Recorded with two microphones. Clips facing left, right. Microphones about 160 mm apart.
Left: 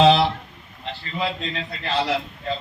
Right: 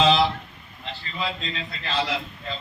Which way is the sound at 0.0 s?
65° left (ahead or behind).